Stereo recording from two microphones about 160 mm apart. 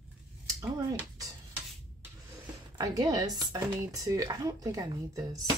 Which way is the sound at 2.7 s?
25° right (ahead or behind).